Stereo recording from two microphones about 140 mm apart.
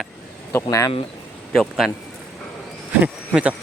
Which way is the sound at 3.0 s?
10° right (ahead or behind).